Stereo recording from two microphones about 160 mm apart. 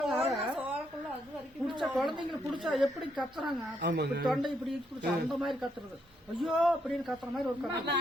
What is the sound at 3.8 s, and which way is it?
Speech, 90° right.